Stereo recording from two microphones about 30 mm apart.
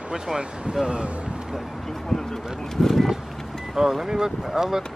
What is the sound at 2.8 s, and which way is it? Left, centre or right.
Speech, centre.